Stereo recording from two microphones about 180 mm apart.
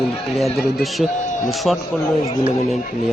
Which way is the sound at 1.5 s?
Centre (ahead or behind).